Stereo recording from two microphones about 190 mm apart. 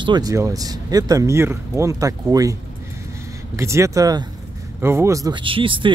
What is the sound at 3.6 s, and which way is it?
Speech, 15° right (ahead or behind).